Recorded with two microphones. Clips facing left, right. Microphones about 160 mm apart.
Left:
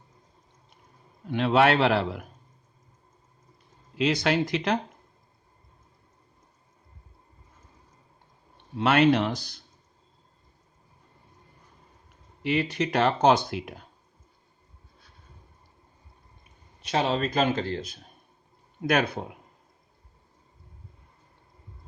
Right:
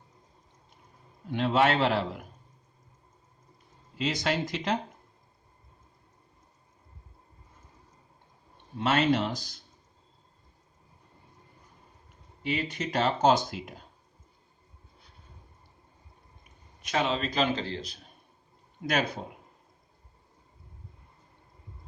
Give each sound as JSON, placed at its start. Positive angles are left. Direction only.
{"t": 1.3, "sound": "speech", "side_deg": 70}
{"t": 3.9, "sound": "speech", "side_deg": 70}
{"t": 8.8, "sound": "speech", "side_deg": 65}
{"t": 12.4, "sound": "speech", "side_deg": 70}
{"t": 16.8, "sound": "a man's voice", "side_deg": 30}
{"t": 17.2, "sound": "speech", "side_deg": 50}
{"t": 18.9, "sound": "speech", "side_deg": 60}